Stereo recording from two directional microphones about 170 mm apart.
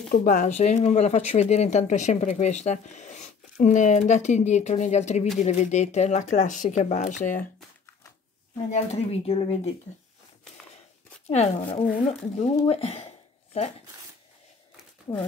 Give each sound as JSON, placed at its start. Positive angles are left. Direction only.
{"t": 0.1, "sound": "speech", "side_deg": 50}
{"t": 8.6, "sound": "speech", "side_deg": 40}
{"t": 11.2, "sound": "speech", "side_deg": 35}
{"t": 12.6, "sound": "a sound", "side_deg": 35}
{"t": 15.1, "sound": "speech", "side_deg": 25}